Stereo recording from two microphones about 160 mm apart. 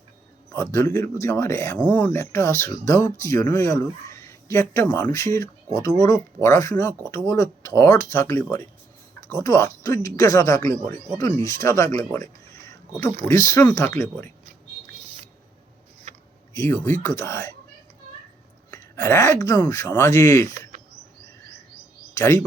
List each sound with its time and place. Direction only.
0.5 s speech: 20° left (ahead or behind)
16.1 s a sound: 45° right (ahead or behind)
16.6 s speech: 15° left (ahead or behind)
18.7 s speech: 15° left (ahead or behind)
20.7 s a sound: 50° right (ahead or behind)
22.1 s speech: 20° left (ahead or behind)